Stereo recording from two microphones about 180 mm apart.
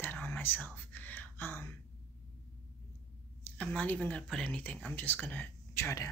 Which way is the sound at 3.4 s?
10° left (ahead or behind).